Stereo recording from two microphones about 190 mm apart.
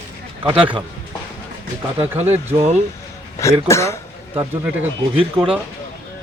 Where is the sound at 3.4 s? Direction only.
15° left (ahead or behind).